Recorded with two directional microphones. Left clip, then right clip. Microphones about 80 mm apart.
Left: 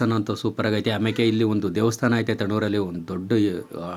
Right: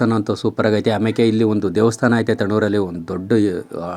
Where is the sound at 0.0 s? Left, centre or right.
Right.